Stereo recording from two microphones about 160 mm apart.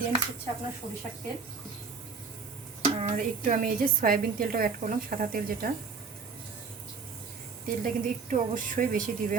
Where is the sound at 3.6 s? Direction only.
65° right (ahead or behind).